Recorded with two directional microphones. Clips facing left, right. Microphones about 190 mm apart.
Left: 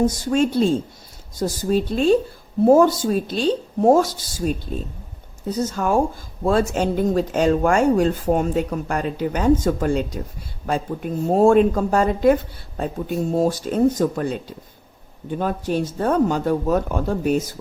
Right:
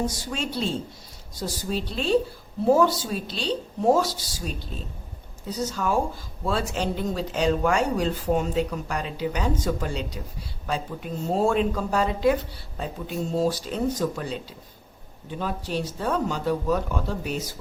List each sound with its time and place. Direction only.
0.0 s speech: 50° left (ahead or behind)